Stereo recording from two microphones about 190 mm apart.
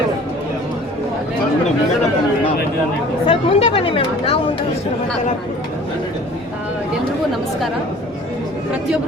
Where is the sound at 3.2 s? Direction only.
30° left (ahead or behind).